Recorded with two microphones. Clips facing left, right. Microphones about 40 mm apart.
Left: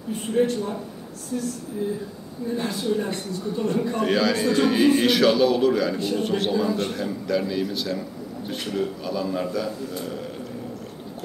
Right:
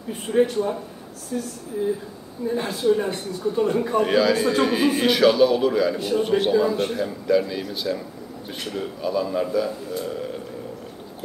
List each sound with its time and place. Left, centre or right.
0.4 s a man's voice: centre
2.6 s a man's voice: centre